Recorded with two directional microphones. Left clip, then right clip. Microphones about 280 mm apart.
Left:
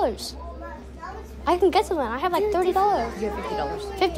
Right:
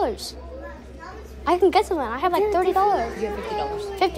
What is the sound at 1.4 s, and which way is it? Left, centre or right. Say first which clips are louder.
A woman's voice: right 2 dB; centre.